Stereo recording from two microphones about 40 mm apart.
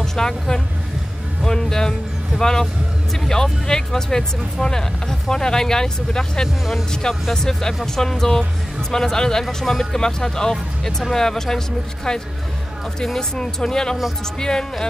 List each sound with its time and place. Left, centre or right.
0.0 s speech: centre